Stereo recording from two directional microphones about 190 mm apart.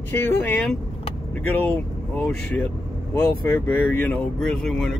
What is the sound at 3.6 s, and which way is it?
Speech, 10° left (ahead or behind).